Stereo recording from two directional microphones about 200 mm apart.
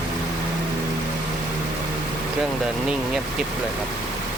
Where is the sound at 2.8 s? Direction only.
5° right (ahead or behind).